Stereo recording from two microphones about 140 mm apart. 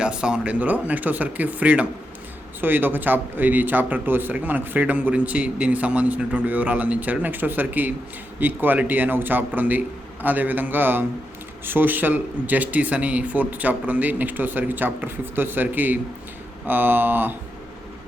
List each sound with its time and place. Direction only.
0.0 s speech: 5° right (ahead or behind)